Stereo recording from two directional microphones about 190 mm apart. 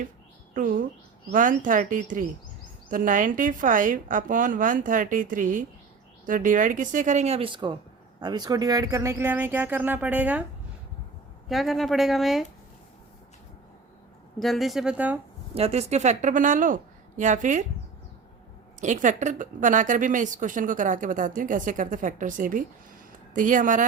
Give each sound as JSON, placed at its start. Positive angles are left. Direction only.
{"t": 0.5, "sound": "a woman's voice", "side_deg": -45}
{"t": 11.4, "sound": "speech", "side_deg": 0}
{"t": 14.3, "sound": "speech", "side_deg": 0}
{"t": 15.5, "sound": "a woman's voice", "side_deg": -35}
{"t": 18.8, "sound": "a woman's voice", "side_deg": -40}